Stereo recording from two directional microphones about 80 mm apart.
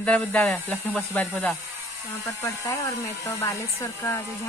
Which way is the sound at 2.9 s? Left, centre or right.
Left.